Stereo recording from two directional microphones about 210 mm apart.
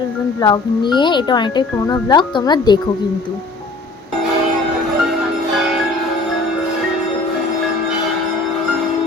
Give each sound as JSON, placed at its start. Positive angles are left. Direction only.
{"t": 0.3, "sound": "speech", "side_deg": 20}